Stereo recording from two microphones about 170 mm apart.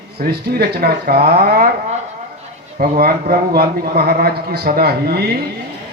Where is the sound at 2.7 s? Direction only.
60° right (ahead or behind).